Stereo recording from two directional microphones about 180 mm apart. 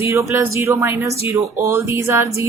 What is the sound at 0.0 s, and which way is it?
Speech, 15° right (ahead or behind).